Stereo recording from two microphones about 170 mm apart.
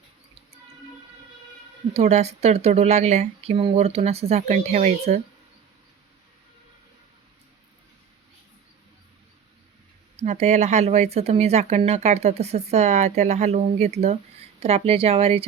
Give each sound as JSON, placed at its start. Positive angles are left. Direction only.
{"t": 1.9, "sound": "speech", "side_deg": -40}
{"t": 10.2, "sound": "speech", "side_deg": -40}